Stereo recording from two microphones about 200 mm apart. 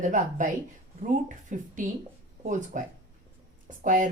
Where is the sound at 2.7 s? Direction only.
40° right (ahead or behind).